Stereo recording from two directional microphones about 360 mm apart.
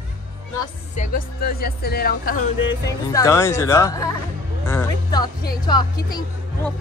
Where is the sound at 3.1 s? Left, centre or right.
Centre.